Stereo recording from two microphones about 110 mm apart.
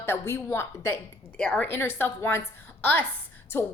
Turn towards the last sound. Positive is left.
turn(degrees=20)  # may be behind; listen again after turning